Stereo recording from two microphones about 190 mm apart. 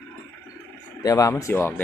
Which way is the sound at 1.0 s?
20° left (ahead or behind).